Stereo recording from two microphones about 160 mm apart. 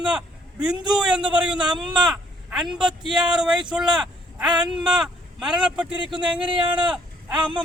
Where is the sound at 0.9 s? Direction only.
5° right (ahead or behind).